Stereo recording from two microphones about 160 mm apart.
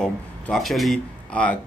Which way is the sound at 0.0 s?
Centre (ahead or behind).